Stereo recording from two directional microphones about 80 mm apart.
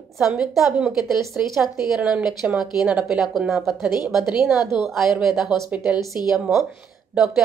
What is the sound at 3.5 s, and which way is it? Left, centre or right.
A woman's voice, centre.